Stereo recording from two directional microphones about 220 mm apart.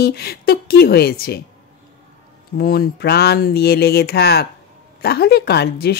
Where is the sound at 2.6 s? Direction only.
45° left (ahead or behind).